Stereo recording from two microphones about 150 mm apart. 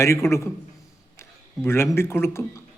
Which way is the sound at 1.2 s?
15° left (ahead or behind).